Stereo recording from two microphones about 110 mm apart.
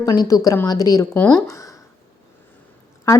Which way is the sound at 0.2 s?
35° left (ahead or behind).